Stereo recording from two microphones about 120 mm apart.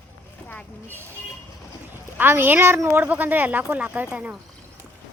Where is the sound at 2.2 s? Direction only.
15° right (ahead or behind).